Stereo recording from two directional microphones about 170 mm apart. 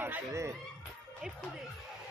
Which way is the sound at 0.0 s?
15° right (ahead or behind).